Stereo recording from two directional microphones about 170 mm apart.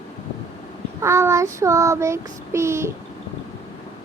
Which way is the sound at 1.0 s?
15° right (ahead or behind).